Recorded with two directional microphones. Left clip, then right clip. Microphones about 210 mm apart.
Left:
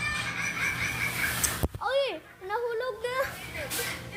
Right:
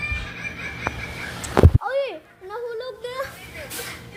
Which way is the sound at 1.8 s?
45° left (ahead or behind).